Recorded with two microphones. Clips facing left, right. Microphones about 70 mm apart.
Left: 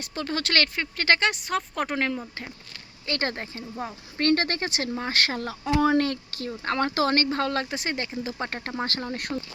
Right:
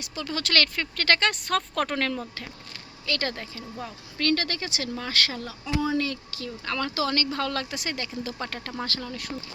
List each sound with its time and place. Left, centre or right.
0.0 s speech: left
9.1 s speech: left